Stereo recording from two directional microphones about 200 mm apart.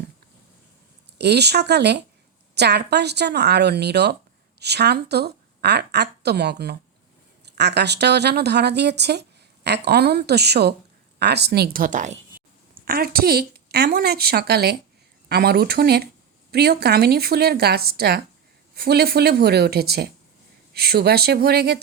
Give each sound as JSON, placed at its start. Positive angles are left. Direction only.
{"t": 1.2, "sound": "a woman's voice", "side_deg": -55}
{"t": 12.8, "sound": "a woman's voice", "side_deg": -50}